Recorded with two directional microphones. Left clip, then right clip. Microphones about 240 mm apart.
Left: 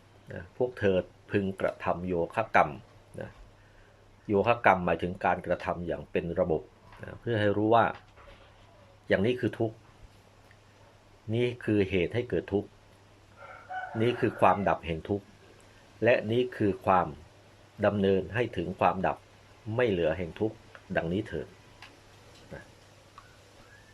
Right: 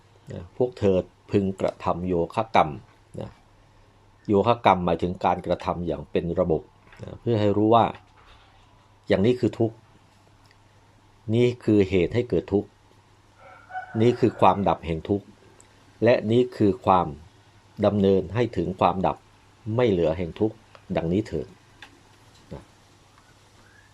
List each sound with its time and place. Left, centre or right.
0.3 s speech: right
4.3 s speech: right
9.0 s speech: right
11.3 s speech: right
14.0 s speech: right